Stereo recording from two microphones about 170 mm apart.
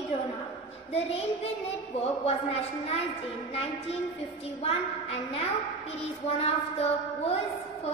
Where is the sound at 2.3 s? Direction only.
35° left (ahead or behind).